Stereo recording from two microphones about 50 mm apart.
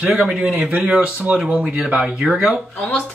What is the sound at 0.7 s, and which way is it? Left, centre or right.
Speech, centre.